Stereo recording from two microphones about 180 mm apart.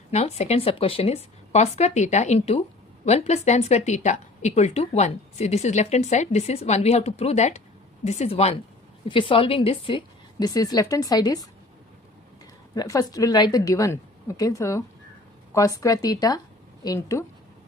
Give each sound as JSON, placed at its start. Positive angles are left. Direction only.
{"t": 0.1, "sound": "a woman's voice", "side_deg": 35}
{"t": 12.7, "sound": "a woman's voice", "side_deg": 20}